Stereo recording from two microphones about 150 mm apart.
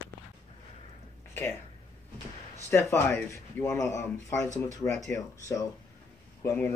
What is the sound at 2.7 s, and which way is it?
Speech, 20° left (ahead or behind).